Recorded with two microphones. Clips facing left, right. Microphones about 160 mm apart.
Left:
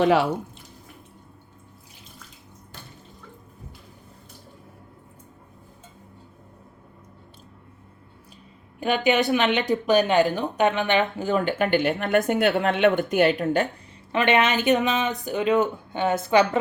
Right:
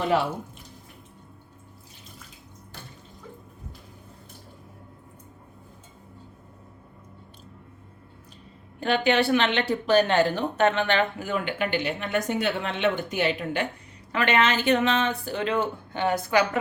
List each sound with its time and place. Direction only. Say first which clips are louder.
0.0 s speech: left 5 dB; 90° left
8.8 s speech: left 1 dB; 15° left (ahead or behind)
11.2 s speech: left 5 dB; 35° left (ahead or behind)
14.1 s speech: left 2 dB; 20° left (ahead or behind)